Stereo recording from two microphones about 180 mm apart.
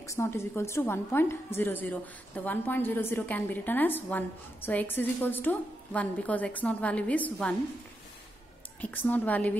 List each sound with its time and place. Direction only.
0.0 s a woman's voice: 15° left (ahead or behind)
8.8 s a woman's voice: 10° left (ahead or behind)